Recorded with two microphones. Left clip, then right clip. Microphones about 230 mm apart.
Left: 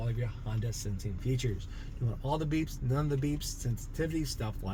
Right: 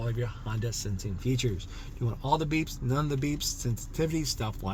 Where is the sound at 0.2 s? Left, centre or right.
Right.